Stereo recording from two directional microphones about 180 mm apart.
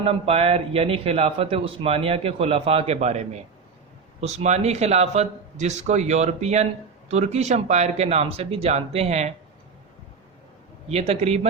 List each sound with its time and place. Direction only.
0.0 s a man's voice: 35° right (ahead or behind)
10.8 s a man's voice: 35° right (ahead or behind)